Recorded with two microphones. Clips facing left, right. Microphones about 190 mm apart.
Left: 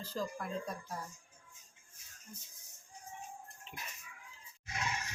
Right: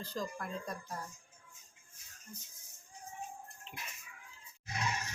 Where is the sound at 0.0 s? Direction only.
5° left (ahead or behind).